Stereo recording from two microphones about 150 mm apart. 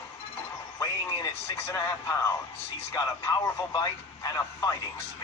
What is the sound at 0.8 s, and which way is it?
A man's voice, 20° left (ahead or behind).